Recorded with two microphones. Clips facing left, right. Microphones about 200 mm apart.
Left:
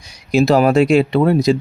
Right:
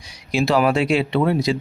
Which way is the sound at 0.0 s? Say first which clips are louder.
Left 7 dB; 45° left (ahead or behind).